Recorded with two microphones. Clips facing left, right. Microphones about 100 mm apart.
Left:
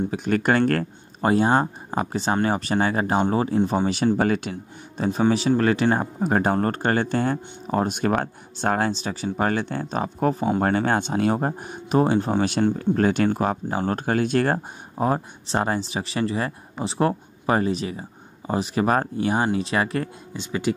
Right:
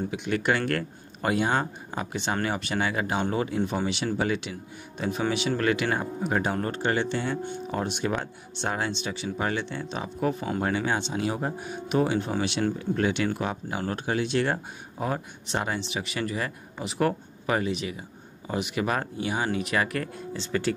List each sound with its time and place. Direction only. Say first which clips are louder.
0.1 s speech: left 4 dB; 40° left (ahead or behind)
3.8 s speech: left 6 dB; 45° left (ahead or behind); by 20.1 s 30° left (ahead or behind)
20.3 s speech: left 3 dB; 15° left (ahead or behind)